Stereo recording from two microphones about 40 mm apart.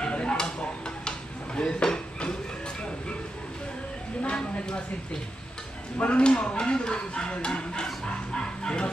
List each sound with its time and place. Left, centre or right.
0.0 s a sound: left
4.4 s speech: left
5.9 s speech: left